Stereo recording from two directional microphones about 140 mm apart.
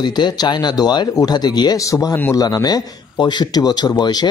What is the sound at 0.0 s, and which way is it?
Speech, 30° left (ahead or behind).